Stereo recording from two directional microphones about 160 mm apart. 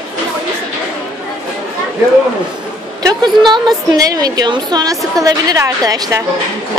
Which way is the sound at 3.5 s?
25° right (ahead or behind).